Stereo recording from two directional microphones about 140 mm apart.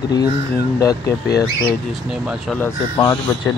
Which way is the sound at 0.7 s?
25° left (ahead or behind).